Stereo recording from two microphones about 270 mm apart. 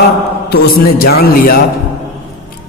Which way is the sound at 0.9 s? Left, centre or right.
Left.